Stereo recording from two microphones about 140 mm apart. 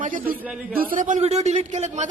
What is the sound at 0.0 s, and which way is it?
Speech, 70° right (ahead or behind).